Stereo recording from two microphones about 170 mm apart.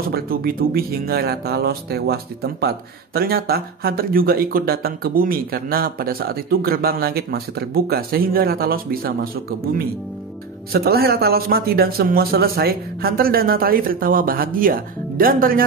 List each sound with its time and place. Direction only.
0.1 s speech: 65° right (ahead or behind)